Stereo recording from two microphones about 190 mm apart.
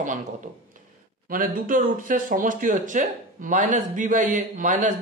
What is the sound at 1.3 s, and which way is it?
Speech, 45° right (ahead or behind).